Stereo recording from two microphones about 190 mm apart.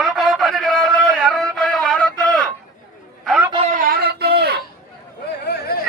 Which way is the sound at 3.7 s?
45° right (ahead or behind).